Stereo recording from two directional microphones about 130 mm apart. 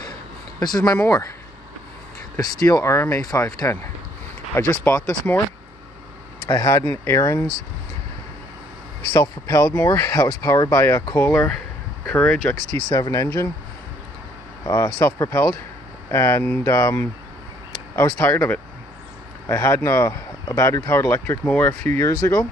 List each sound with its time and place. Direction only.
0.6 s speech: 30° left (ahead or behind)
2.3 s speech: 25° left (ahead or behind)
4.8 s speech: 10° left (ahead or behind)
6.4 s speech: 25° left (ahead or behind)
9.1 s speech: 30° left (ahead or behind)
9.6 s speech: 15° left (ahead or behind)
12.9 s speech: 30° left (ahead or behind)
14.6 s speech: 25° left (ahead or behind)
18.2 s speech: 15° left (ahead or behind); by 22.5 s 30° left (ahead or behind)